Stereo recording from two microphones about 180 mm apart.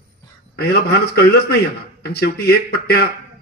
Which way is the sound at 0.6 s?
60° left (ahead or behind).